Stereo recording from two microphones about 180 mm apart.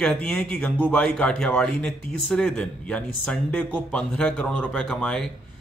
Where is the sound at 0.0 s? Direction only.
5° left (ahead or behind).